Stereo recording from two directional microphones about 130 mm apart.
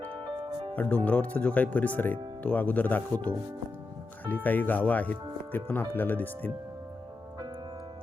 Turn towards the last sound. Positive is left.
turn(degrees=15)  # may be behind; listen again after turning